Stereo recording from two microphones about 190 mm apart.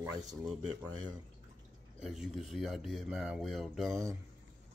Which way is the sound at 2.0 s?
Centre (ahead or behind).